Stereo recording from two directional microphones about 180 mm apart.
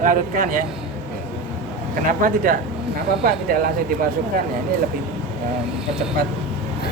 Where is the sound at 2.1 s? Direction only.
50° right (ahead or behind).